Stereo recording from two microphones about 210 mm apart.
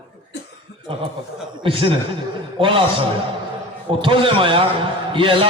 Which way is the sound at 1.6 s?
25° right (ahead or behind).